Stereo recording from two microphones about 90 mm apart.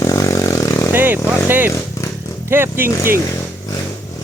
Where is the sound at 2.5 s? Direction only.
25° right (ahead or behind).